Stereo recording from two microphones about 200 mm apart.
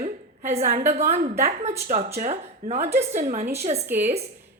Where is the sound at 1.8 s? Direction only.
45° right (ahead or behind).